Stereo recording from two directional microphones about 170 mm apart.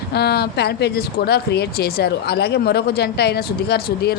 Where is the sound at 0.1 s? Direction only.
70° left (ahead or behind).